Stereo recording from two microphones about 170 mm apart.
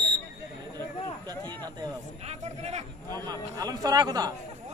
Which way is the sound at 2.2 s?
40° right (ahead or behind).